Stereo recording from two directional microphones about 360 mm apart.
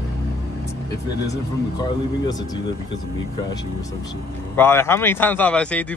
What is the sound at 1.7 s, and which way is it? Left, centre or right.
Speech, centre.